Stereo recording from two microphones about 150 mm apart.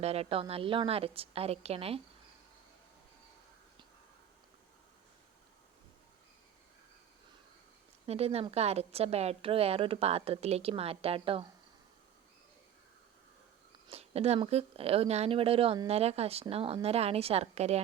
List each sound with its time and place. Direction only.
0.0 s a woman's voice: 45° right (ahead or behind)
8.0 s a woman's voice: 45° right (ahead or behind)
13.8 s a woman's voice: 40° right (ahead or behind)